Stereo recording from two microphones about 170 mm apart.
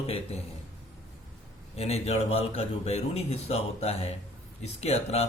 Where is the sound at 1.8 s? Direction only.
35° left (ahead or behind).